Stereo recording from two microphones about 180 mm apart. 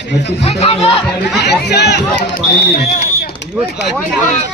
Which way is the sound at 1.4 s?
70° left (ahead or behind).